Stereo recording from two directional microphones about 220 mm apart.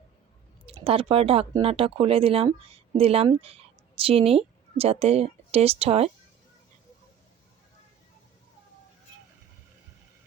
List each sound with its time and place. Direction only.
0.6 s speech: 25° right (ahead or behind)